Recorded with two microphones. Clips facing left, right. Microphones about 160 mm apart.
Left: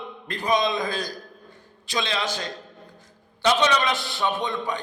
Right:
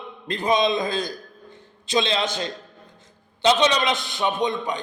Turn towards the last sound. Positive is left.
turn(degrees=-20)  # may be behind; listen again after turning